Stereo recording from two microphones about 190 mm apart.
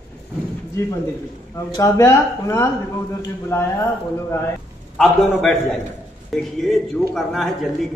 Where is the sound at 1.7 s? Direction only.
15° left (ahead or behind).